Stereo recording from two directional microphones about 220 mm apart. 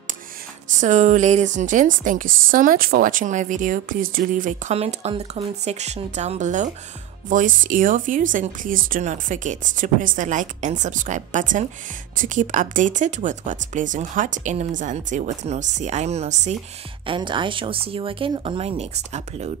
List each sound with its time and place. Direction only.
0.7 s speech: 35° right (ahead or behind)